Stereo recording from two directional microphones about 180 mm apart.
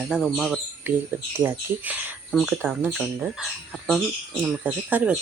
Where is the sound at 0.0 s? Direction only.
5° left (ahead or behind).